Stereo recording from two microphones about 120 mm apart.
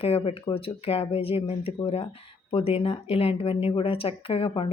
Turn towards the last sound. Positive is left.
turn(degrees=50)  # may be behind; listen again after turning